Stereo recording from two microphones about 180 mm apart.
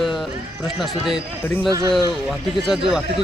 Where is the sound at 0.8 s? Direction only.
Centre (ahead or behind).